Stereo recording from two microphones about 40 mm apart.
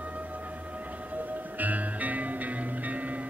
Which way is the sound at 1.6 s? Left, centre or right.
Right.